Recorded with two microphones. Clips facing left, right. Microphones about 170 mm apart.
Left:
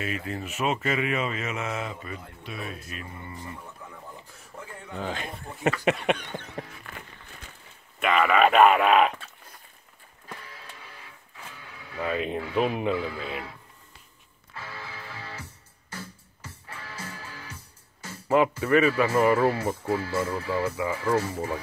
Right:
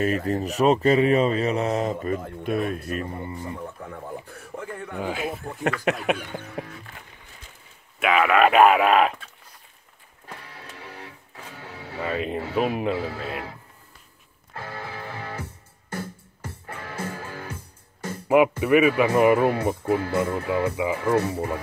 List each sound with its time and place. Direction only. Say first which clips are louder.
0.0 s speech: right 9 dB; 40° right (ahead or behind)
3.9 s a sound: right 9 dB; 60° right (ahead or behind)
4.9 s speech: right 4 dB; 10° right (ahead or behind)
8.0 s speech: right 2 dB; 5° right (ahead or behind)
10.4 s music: right 4 dB; 65° right (ahead or behind)
11.5 s vehicle: right 7 dB; 75° right (ahead or behind)
12.0 s speech: right 1 dB; centre (ahead or behind)
13.1 s speech: right 2 dB; 70° right (ahead or behind)
14.5 s music: right 6 dB; 50° right (ahead or behind)
18.6 s speech: right 3 dB; 15° right (ahead or behind)
21.2 s speech: right 4 dB; 60° right (ahead or behind)